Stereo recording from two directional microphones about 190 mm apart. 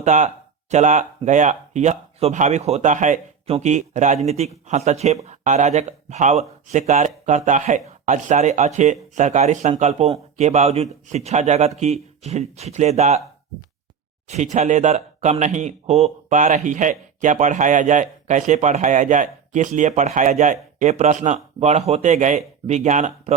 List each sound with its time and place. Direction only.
0.0 s speech: 40° right (ahead or behind)
14.3 s speech: 40° right (ahead or behind)